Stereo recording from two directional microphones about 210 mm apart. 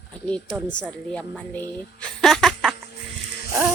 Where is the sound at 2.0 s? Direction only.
5° left (ahead or behind).